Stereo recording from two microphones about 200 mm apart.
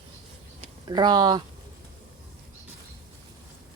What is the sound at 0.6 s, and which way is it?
Speech, 20° right (ahead or behind).